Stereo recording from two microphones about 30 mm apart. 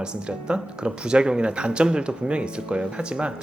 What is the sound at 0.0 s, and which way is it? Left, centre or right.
Speech, right.